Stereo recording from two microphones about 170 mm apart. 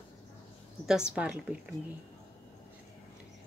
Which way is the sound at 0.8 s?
5° right (ahead or behind).